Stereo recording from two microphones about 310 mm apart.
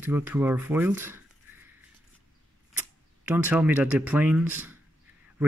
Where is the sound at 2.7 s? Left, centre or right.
Centre.